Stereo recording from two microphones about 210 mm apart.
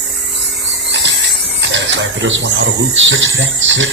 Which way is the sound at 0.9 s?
55° right (ahead or behind).